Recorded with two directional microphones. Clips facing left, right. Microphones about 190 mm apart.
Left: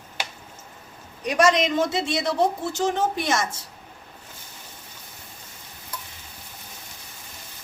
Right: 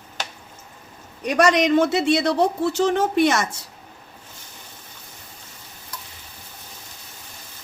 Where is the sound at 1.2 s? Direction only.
60° right (ahead or behind).